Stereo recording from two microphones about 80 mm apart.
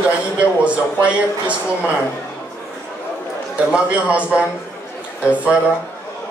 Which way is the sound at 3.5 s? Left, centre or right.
Centre.